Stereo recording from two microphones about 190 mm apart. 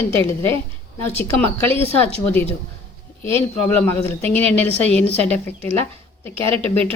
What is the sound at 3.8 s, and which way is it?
Speech, 10° left (ahead or behind).